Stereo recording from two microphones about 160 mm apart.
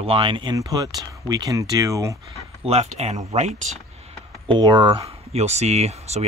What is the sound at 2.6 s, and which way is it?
Speech, 40° right (ahead or behind).